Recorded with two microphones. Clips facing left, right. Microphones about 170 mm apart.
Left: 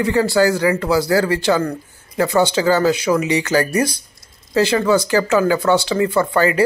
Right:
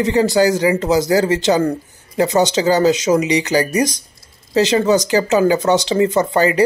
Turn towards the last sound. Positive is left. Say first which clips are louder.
# right 1 dB
turn(degrees=-20)  # may be behind; listen again after turning